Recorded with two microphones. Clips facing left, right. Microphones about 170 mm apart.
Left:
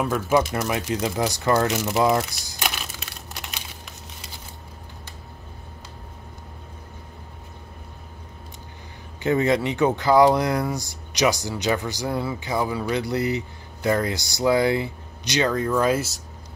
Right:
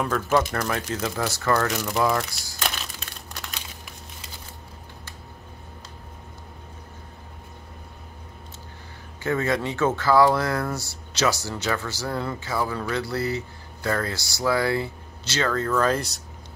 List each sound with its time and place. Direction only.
0.0 s speech: 10° left (ahead or behind)
9.2 s speech: 20° left (ahead or behind)